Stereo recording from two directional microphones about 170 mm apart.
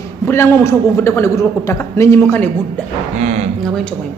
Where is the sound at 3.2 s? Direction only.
40° right (ahead or behind).